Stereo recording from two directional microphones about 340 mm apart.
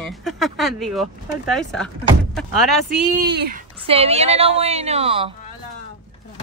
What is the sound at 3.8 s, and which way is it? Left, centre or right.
A woman's voice, centre.